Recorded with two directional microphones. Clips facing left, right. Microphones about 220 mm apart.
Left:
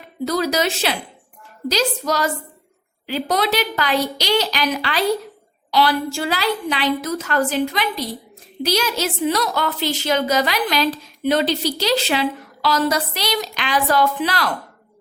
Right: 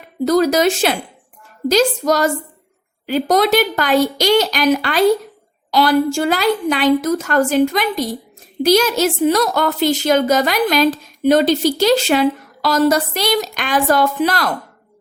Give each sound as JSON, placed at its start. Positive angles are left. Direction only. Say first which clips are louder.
{"t": 0.3, "sound": "a woman's voice", "louder": "right 7 dB", "side_deg": -50}